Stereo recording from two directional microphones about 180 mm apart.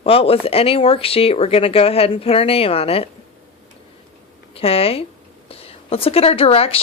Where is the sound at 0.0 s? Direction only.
30° left (ahead or behind).